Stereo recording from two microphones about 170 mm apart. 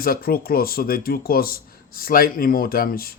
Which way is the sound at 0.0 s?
60° left (ahead or behind).